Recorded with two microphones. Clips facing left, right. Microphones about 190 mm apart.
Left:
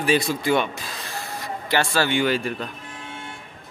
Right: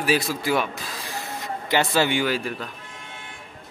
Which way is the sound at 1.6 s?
20° right (ahead or behind).